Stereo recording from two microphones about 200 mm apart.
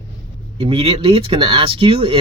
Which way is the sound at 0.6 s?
30° right (ahead or behind).